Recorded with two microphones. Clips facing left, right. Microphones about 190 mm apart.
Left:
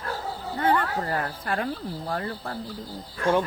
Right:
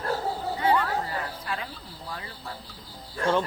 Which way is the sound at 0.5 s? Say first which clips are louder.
Left 2 dB; 50° left (ahead or behind).